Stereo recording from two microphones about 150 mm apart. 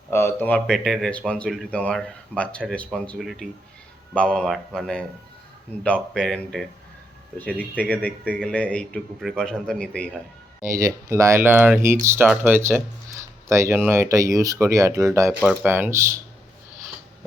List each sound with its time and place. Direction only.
0.1 s a man's voice: 15° left (ahead or behind)
10.7 s speech: 20° right (ahead or behind)
15.4 s speech: 10° right (ahead or behind)